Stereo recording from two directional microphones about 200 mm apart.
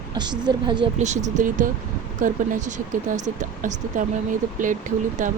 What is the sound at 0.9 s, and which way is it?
Speech, 35° right (ahead or behind).